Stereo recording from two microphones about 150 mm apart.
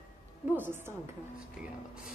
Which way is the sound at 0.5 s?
15° right (ahead or behind).